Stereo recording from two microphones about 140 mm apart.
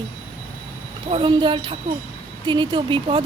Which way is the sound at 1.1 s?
35° right (ahead or behind).